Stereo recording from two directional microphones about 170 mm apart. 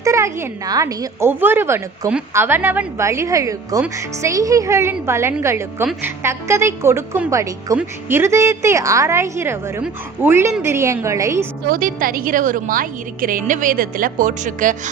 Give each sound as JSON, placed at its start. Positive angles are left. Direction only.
{"t": 0.0, "sound": "a woman's voice", "side_deg": -20}
{"t": 11.7, "sound": "a woman's voice", "side_deg": -55}